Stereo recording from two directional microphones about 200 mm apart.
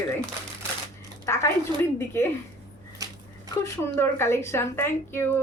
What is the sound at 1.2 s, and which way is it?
Speech, 15° left (ahead or behind).